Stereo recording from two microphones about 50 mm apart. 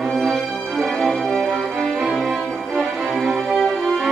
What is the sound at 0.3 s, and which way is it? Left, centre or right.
Music, centre.